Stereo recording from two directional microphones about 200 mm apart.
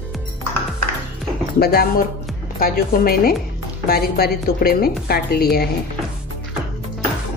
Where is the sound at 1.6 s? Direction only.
50° left (ahead or behind).